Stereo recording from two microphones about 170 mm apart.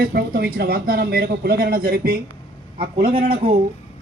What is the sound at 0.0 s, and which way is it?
A man's voice, 65° right (ahead or behind).